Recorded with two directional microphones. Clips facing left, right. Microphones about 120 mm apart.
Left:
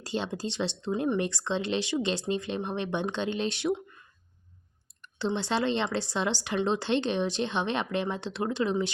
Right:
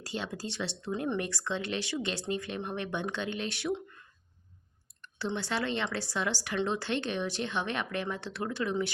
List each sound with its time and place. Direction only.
0.0 s speech: 25° left (ahead or behind)
5.0 s speech: 20° left (ahead or behind)